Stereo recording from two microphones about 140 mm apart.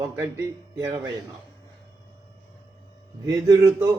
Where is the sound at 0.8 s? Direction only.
25° right (ahead or behind).